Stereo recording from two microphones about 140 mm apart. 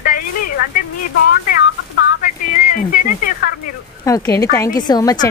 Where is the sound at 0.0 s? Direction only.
90° left.